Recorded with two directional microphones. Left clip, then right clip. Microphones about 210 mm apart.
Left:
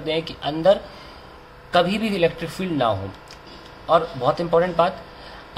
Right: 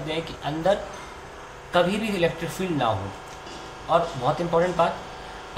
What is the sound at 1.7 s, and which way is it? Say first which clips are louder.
Speech: left 3 dB; 35° left (ahead or behind).